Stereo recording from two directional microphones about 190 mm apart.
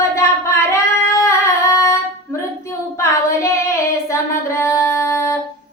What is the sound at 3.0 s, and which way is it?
Speech, 15° left (ahead or behind).